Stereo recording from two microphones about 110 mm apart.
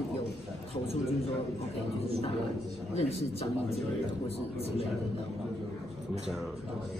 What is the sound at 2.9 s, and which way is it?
Speech, 70° left (ahead or behind).